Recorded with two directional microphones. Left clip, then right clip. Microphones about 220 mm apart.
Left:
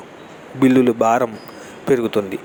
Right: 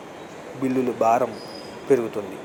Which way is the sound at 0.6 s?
50° left (ahead or behind).